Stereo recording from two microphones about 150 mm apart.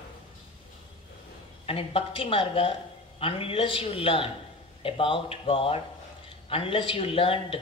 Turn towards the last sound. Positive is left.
turn(degrees=35)  # may be behind; listen again after turning